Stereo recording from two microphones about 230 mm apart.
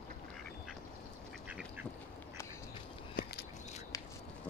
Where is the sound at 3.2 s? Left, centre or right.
Left.